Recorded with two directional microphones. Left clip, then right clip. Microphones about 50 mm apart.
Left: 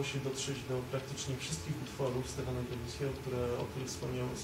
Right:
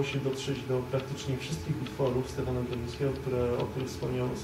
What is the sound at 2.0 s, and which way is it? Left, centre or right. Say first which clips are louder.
Speech: right 7 dB; left.